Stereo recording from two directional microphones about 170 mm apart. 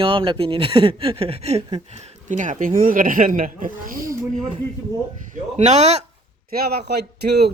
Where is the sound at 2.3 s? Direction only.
45° right (ahead or behind).